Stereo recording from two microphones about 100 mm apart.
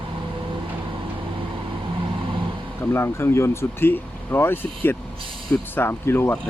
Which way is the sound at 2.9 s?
25° left (ahead or behind).